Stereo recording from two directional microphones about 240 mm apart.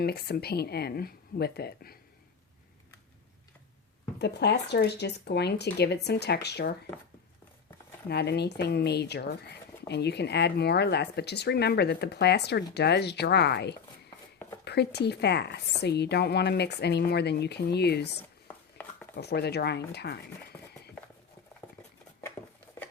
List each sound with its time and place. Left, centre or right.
0.0 s speech: left
4.2 s speech: left
8.1 s speech: left
18.8 s a sound: centre
19.1 s speech: left